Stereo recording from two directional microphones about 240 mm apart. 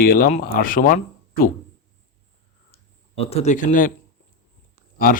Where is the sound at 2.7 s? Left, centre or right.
Left.